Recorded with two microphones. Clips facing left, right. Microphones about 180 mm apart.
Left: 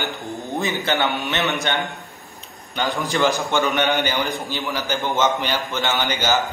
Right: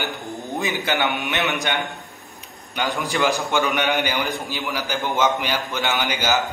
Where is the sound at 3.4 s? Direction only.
Centre (ahead or behind).